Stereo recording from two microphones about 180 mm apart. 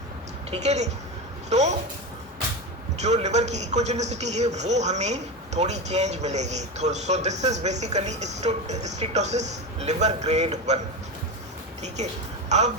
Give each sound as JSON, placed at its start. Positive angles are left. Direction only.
{"t": 0.5, "sound": "a man's voice", "side_deg": -40}
{"t": 3.0, "sound": "a man's voice", "side_deg": -40}
{"t": 12.5, "sound": "speech", "side_deg": -40}